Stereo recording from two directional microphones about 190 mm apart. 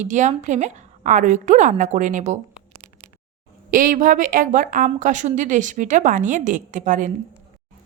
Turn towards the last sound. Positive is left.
turn(degrees=-40)  # may be behind; listen again after turning